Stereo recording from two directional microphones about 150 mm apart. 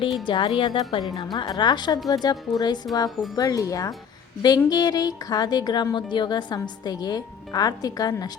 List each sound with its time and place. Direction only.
0.3 s a woman's voice: 35° left (ahead or behind)